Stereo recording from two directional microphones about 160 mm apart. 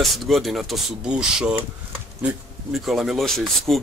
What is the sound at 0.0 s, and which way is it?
Speech, centre (ahead or behind).